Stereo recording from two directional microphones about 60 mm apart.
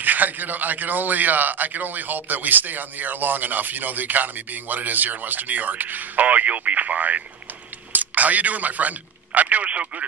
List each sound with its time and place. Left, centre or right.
0.0 s a man's voice: right